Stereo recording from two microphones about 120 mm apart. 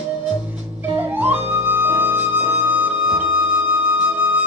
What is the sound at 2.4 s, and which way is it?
Flute, 50° right (ahead or behind).